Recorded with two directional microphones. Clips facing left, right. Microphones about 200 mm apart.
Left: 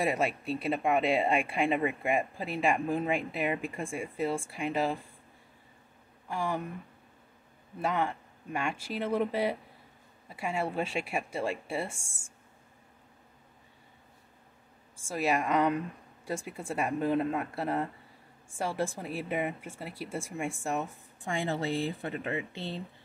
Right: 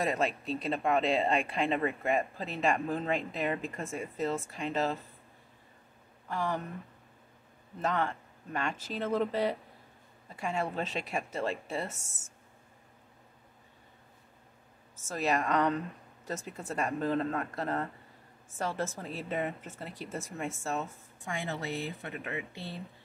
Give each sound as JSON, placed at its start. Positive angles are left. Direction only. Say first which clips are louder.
{"t": 0.0, "sound": "speech", "louder": "left 1 dB", "side_deg": 10}
{"t": 6.2, "sound": "speech", "louder": "left 1 dB", "side_deg": 10}
{"t": 7.8, "sound": "speech", "louder": "left 1 dB", "side_deg": 10}
{"t": 15.0, "sound": "speech", "louder": "left 1 dB", "side_deg": 10}
{"t": 21.2, "sound": "speech", "louder": "left 5 dB", "side_deg": 30}